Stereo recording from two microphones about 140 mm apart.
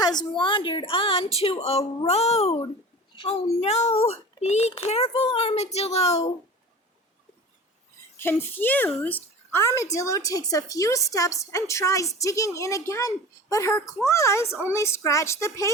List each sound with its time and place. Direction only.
0.3 s a child's voice: 35° left (ahead or behind); by 6.3 s 50° left (ahead or behind)
8.2 s a child's voice: 15° left (ahead or behind)